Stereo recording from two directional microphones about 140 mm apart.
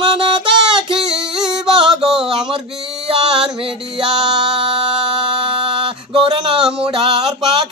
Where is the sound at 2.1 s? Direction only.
5° right (ahead or behind).